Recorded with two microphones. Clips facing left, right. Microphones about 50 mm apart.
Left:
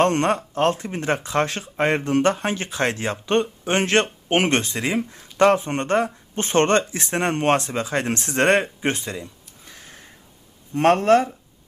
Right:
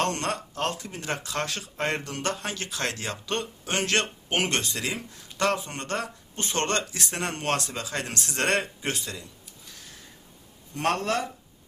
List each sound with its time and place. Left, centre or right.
0.0 s speech: left